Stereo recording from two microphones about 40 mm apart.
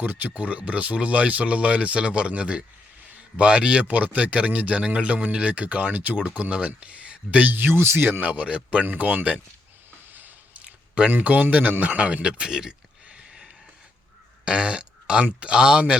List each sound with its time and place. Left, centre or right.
0.0 s a man's voice: right
3.8 s speech: right
6.1 s a man's voice: right
7.5 s speech: right
8.2 s speech: right
8.4 s a man's voice: right
8.8 s speech: right
10.1 s squish: right
11.2 s speech: right
12.5 s speech: centre
14.4 s speech: right